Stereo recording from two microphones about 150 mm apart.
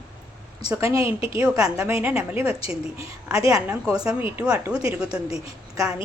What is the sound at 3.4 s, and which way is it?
Speech, 20° right (ahead or behind).